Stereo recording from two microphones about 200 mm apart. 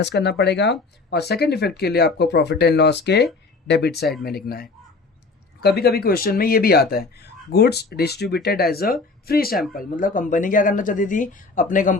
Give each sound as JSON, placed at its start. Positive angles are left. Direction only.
{"t": 0.0, "sound": "speech", "side_deg": 55}